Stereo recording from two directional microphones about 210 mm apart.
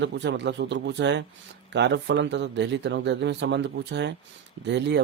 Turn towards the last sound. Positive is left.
turn(degrees=-55)  # may be behind; listen again after turning